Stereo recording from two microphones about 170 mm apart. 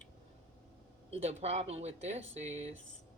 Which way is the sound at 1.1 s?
35° right (ahead or behind).